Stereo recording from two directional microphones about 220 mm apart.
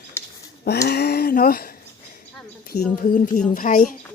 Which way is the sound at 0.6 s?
45° left (ahead or behind).